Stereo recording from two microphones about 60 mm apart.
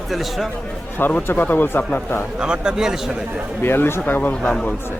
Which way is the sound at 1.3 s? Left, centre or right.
Left.